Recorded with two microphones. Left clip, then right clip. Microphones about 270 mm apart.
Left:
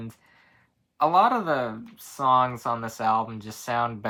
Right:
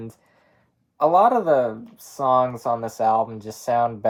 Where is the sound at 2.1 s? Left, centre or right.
Left.